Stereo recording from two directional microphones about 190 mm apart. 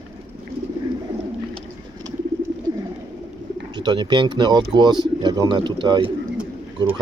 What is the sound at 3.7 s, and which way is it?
Speech, 20° right (ahead or behind).